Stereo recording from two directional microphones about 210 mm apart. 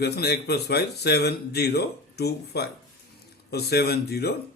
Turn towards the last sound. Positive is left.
turn(degrees=50)  # may be behind; listen again after turning